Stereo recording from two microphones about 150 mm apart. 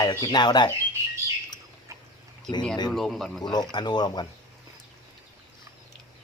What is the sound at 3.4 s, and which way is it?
Speech, 30° left (ahead or behind).